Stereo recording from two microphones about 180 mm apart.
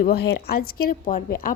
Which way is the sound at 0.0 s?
60° left (ahead or behind).